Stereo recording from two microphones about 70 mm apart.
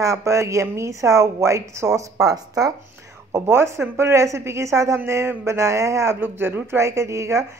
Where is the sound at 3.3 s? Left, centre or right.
Right.